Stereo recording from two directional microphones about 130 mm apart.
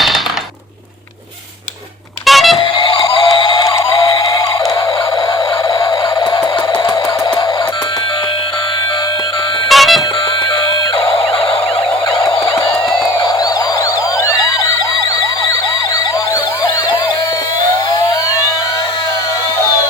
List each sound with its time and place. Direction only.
2.2 s a sound: centre (ahead or behind)
2.6 s vehicle: 40° left (ahead or behind)
3.1 s synthetic singing: 35° left (ahead or behind)
5.6 s a sound: 30° left (ahead or behind)
9.6 s music: centre (ahead or behind)
14.3 s police car: 25° left (ahead or behind)